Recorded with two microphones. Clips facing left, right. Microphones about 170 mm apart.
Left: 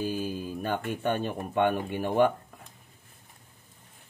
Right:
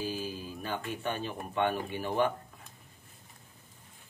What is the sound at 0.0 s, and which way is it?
Speech, 50° left (ahead or behind).